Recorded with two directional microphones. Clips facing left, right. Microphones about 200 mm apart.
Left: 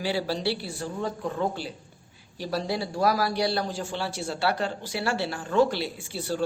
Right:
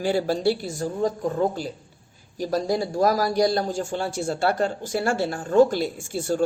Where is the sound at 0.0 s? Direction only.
45° right (ahead or behind).